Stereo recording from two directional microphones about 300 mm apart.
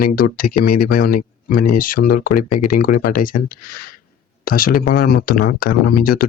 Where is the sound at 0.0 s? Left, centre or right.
Left.